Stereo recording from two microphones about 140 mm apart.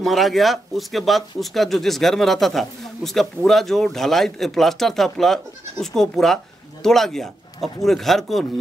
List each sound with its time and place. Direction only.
0.0 s speech: centre (ahead or behind)